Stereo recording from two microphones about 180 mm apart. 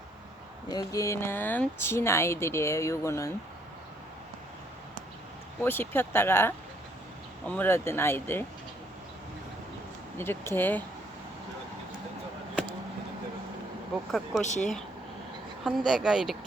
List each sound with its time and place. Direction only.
0.7 s speech: 20° left (ahead or behind)
5.6 s speech: 10° left (ahead or behind)
10.2 s speech: 15° left (ahead or behind)
13.9 s speech: centre (ahead or behind)
14.4 s speech: 40° left (ahead or behind)
15.6 s speech: centre (ahead or behind)